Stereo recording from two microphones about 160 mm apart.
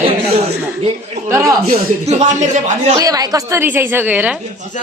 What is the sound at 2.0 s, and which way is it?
Speech, 45° right (ahead or behind).